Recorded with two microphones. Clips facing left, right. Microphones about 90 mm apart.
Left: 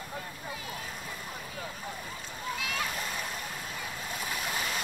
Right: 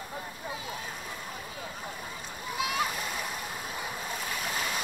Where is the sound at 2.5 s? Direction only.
20° right (ahead or behind).